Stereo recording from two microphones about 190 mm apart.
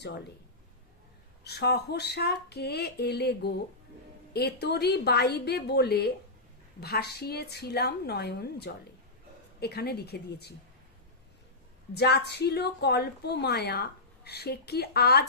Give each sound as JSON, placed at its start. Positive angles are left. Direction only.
{"t": 0.0, "sound": "a woman's voice", "side_deg": 60}
{"t": 1.5, "sound": "a woman's voice", "side_deg": 60}
{"t": 11.9, "sound": "a woman's voice", "side_deg": 60}